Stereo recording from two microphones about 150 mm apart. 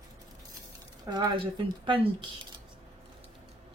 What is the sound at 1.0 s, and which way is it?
Speech, 30° right (ahead or behind).